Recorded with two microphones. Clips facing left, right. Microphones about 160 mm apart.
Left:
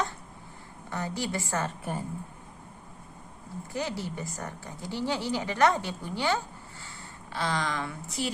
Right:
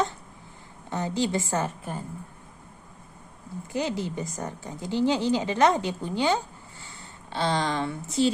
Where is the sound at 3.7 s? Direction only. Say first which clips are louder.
Right 5 dB; 20° right (ahead or behind).